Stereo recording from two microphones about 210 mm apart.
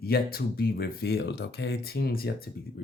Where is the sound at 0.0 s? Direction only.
45° left (ahead or behind).